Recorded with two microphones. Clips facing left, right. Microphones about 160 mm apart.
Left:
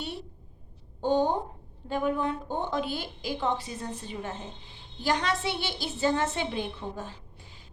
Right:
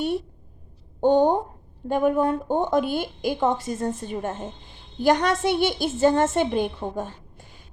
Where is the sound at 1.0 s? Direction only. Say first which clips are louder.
Right 7 dB; 55° right (ahead or behind).